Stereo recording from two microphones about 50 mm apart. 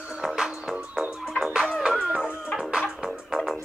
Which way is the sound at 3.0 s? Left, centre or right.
Centre.